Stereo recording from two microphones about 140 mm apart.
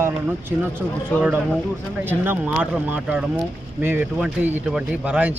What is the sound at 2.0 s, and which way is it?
Speech, 15° right (ahead or behind).